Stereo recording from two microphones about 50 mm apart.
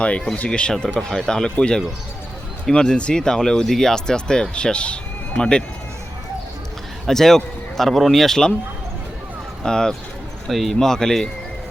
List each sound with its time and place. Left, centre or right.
0.3 s speech: left
0.9 s speech: centre
7.1 s speech: centre
9.6 s speech: centre
10.5 s speech: centre